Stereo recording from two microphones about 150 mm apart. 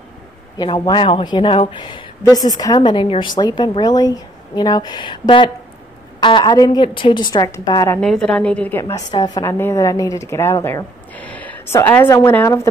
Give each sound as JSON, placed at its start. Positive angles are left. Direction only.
{"t": 0.6, "sound": "a woman's voice", "side_deg": 30}
{"t": 8.0, "sound": "a woman's voice", "side_deg": 5}